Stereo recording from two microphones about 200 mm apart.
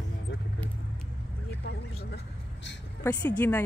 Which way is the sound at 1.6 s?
60° left (ahead or behind).